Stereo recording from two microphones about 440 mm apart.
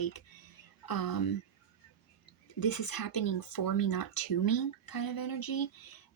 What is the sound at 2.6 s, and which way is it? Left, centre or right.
Speech, left.